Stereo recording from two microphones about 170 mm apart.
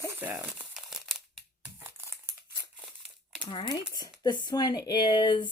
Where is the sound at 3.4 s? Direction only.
30° left (ahead or behind).